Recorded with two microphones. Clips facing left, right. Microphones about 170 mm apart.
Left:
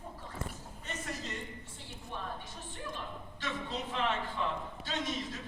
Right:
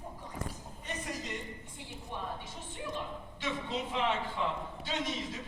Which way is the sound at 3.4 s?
20° right (ahead or behind).